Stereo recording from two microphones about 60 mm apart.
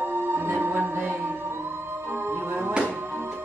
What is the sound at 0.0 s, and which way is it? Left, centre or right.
Music, right.